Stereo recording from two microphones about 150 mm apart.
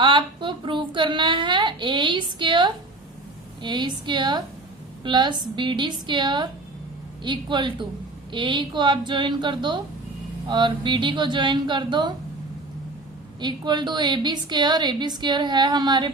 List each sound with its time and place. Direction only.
0.0 s a sound: 35° right (ahead or behind)
3.6 s a woman's voice: 30° right (ahead or behind)
13.4 s a woman's voice: 30° right (ahead or behind)